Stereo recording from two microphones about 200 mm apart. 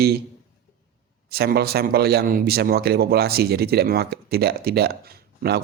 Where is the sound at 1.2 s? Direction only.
50° right (ahead or behind).